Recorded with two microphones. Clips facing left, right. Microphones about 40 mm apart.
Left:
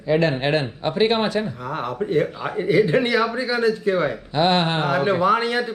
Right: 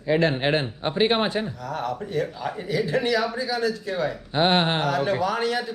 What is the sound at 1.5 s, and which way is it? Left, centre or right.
Speech, left.